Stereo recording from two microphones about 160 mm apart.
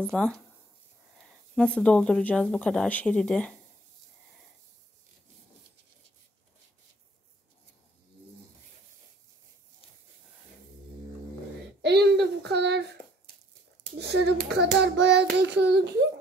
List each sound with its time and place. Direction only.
0.1 s speech: 5° left (ahead or behind)
1.5 s speech: 5° left (ahead or behind)
11.8 s a sound: 90° right
13.9 s hands: 90° right